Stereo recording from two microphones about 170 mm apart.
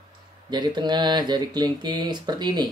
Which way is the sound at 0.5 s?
25° right (ahead or behind).